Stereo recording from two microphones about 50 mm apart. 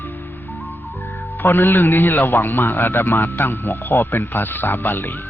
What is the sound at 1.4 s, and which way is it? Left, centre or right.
A man's voice, left.